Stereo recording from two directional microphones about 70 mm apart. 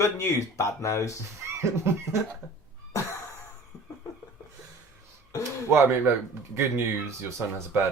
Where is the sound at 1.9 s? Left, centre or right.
Right.